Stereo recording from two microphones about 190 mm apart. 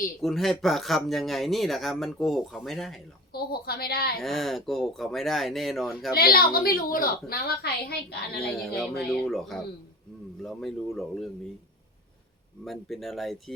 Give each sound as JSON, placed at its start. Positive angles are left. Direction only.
{"t": 0.2, "sound": "speech", "side_deg": 0}
{"t": 3.3, "sound": "a woman's voice", "side_deg": 55}
{"t": 4.2, "sound": "speech", "side_deg": 0}
{"t": 6.1, "sound": "a woman's voice", "side_deg": 50}
{"t": 8.7, "sound": "speech", "side_deg": 0}
{"t": 12.6, "sound": "speech", "side_deg": 0}